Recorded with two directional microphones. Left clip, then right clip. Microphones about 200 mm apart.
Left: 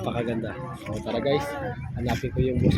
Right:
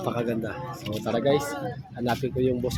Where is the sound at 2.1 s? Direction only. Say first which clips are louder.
Right 2 dB; 25° right (ahead or behind).